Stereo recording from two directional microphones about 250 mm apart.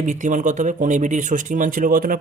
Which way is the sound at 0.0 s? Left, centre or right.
Right.